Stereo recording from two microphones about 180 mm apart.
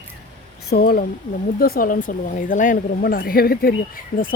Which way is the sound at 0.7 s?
55° left (ahead or behind).